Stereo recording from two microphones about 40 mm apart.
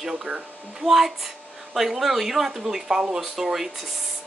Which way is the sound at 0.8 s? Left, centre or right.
Centre.